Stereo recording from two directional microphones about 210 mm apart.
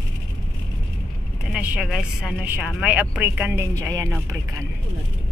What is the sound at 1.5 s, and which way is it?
Speech, 5° right (ahead or behind).